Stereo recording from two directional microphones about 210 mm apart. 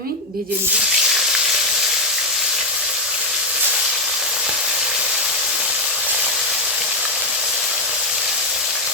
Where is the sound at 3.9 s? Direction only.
Centre (ahead or behind).